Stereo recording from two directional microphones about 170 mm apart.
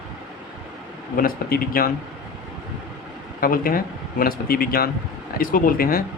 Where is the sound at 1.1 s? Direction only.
60° left (ahead or behind).